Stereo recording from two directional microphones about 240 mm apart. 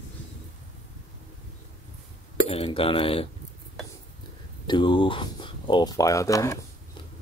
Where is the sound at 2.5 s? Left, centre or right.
Left.